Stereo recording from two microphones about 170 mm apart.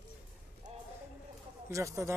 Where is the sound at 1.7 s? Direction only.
20° right (ahead or behind).